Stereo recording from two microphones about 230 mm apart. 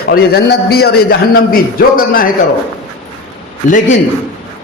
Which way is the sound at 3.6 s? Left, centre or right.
Left.